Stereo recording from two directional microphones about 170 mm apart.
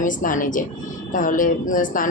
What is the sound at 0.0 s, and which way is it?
A woman's voice, 50° left (ahead or behind).